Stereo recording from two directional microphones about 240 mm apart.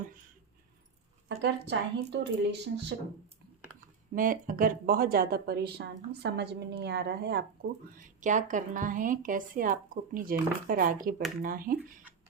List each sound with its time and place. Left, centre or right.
1.4 s speech: right
4.1 s a woman's voice: right